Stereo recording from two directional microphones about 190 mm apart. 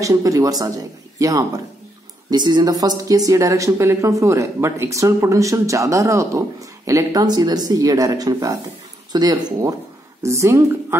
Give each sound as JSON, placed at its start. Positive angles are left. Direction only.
{"t": 0.0, "sound": "a woman's voice", "side_deg": -15}